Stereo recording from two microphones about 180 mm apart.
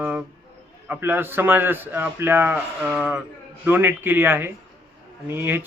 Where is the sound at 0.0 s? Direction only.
10° right (ahead or behind).